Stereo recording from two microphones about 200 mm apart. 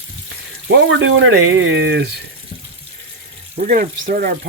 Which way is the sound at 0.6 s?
65° right (ahead or behind).